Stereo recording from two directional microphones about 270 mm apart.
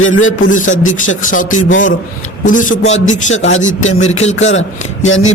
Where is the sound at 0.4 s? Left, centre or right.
Left.